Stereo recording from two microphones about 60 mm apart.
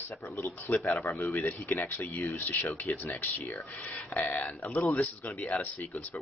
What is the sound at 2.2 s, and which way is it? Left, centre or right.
Speech, left.